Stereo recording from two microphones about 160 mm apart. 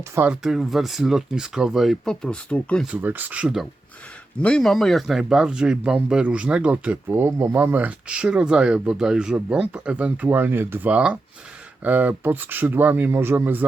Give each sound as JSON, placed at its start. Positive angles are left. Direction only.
{"t": 0.0, "sound": "speech", "side_deg": -15}
{"t": 0.4, "sound": "speech", "side_deg": 0}
{"t": 2.8, "sound": "speech", "side_deg": -10}
{"t": 4.4, "sound": "speech", "side_deg": 5}